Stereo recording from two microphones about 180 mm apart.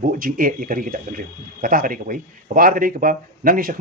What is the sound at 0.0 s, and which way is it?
Speech, 50° right (ahead or behind).